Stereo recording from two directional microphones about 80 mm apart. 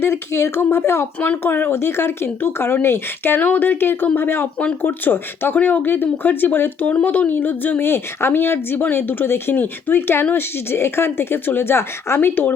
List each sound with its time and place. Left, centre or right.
0.0 s speech: left